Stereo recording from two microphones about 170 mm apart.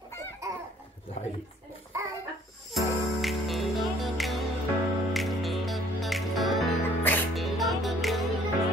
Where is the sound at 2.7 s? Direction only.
Centre (ahead or behind).